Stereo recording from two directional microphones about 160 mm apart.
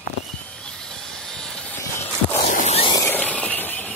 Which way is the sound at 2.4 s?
45° left (ahead or behind).